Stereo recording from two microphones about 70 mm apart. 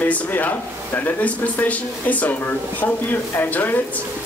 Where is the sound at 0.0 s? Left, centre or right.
Left.